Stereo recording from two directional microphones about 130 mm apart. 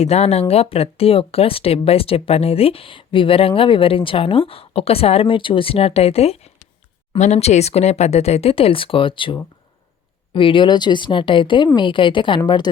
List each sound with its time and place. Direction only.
0.0 s speech: 55° left (ahead or behind)